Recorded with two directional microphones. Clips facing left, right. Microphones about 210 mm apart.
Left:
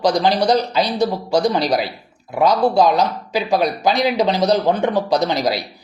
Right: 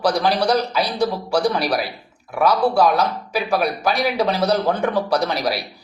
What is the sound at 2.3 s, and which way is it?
Speech, 20° left (ahead or behind).